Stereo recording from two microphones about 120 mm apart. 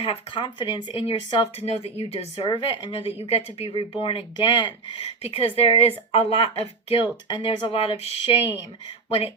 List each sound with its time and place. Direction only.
0.0 s speech: 50° left (ahead or behind)
5.2 s speech: 55° left (ahead or behind)